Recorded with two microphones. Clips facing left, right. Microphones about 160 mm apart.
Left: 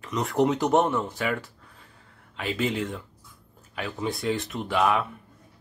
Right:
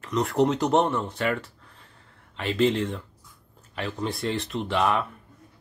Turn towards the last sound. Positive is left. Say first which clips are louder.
# even
turn(degrees=5)  # may be behind; listen again after turning